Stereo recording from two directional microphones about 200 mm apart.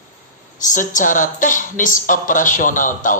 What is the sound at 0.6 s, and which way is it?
Speech, 40° left (ahead or behind).